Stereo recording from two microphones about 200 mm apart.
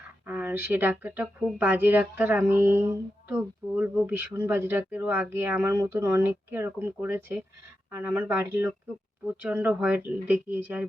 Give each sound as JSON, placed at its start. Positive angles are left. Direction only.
{"t": 0.3, "sound": "speech", "side_deg": -10}